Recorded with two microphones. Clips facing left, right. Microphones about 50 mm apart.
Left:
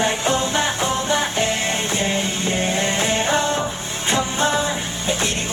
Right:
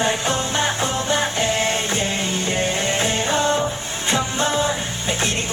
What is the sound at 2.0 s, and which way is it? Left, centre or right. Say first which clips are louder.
Music: left 1 dB; left.